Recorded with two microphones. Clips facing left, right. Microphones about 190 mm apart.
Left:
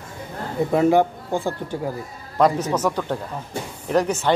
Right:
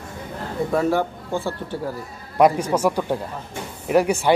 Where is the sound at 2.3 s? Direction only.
10° right (ahead or behind).